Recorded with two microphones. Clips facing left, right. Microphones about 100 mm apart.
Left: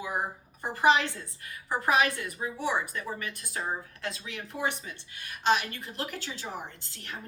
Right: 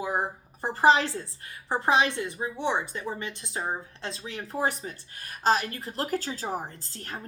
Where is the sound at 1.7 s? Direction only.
25° right (ahead or behind).